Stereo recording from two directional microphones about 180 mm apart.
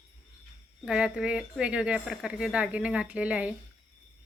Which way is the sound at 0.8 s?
5° right (ahead or behind).